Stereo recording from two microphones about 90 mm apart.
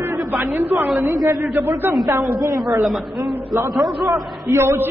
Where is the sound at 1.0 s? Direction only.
40° right (ahead or behind).